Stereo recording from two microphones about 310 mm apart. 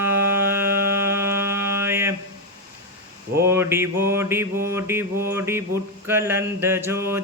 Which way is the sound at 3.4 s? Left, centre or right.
Centre.